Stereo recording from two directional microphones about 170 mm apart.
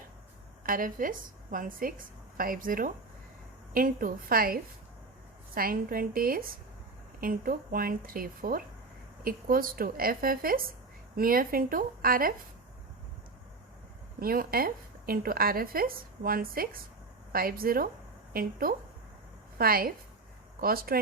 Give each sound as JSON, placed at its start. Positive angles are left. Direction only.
{"t": 0.6, "sound": "a woman's voice", "side_deg": -55}
{"t": 14.2, "sound": "speech", "side_deg": -60}
{"t": 19.5, "sound": "speech", "side_deg": -60}